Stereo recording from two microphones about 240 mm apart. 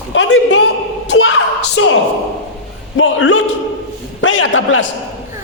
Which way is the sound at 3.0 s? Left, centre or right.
Left.